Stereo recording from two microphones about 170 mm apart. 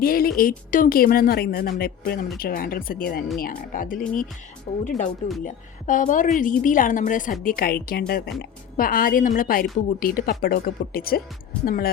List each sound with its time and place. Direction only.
0.0 s a woman's voice: 60° left (ahead or behind)